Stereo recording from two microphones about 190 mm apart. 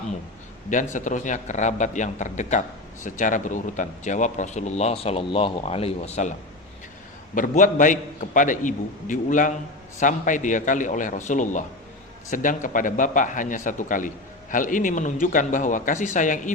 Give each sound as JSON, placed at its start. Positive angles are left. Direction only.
{"t": 0.9, "sound": "speech", "side_deg": 40}
{"t": 7.3, "sound": "a man's voice", "side_deg": 45}